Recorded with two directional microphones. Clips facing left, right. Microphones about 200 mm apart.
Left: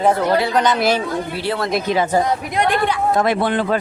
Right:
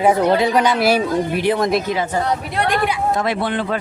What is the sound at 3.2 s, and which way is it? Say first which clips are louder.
Speech: left 3 dB; 50° left (ahead or behind).